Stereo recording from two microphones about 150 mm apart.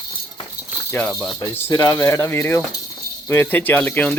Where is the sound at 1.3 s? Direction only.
20° left (ahead or behind).